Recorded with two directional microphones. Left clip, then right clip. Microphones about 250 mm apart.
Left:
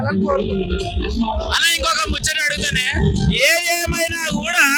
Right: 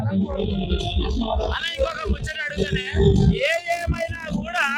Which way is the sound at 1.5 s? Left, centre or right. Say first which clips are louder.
Left 8 dB; left.